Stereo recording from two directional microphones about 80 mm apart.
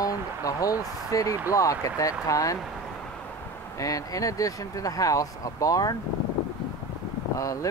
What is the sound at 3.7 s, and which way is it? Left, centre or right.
Speech, left.